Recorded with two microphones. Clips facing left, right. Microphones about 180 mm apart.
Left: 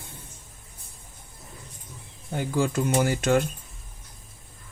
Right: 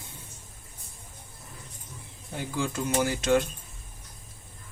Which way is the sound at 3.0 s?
50° left (ahead or behind).